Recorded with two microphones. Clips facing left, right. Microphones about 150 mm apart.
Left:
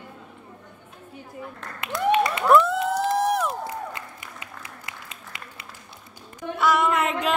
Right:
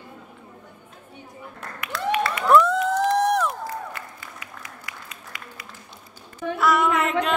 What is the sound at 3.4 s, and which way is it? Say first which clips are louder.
Applause: even; 20° left (ahead or behind).